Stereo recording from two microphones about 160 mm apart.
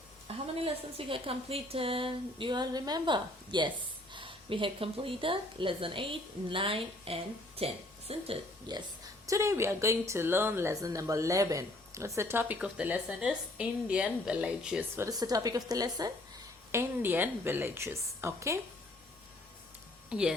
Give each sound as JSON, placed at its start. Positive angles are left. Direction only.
{"t": 0.3, "sound": "a woman's voice", "side_deg": -35}
{"t": 8.7, "sound": "speech", "side_deg": -25}
{"t": 20.1, "sound": "speech", "side_deg": -5}